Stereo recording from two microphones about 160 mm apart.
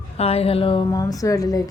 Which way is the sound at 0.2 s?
40° left (ahead or behind).